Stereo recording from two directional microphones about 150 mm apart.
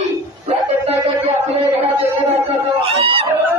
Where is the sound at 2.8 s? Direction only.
40° right (ahead or behind).